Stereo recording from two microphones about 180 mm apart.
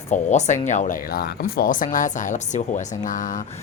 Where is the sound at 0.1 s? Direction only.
40° left (ahead or behind).